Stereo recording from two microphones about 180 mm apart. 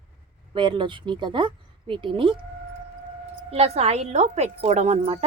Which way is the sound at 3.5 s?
35° right (ahead or behind).